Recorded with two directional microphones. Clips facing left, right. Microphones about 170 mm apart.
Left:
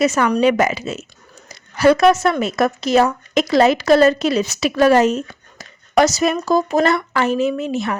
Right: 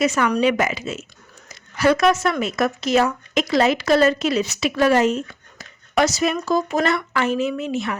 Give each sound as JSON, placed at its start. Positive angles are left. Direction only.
{"t": 0.0, "sound": "speech", "side_deg": 35}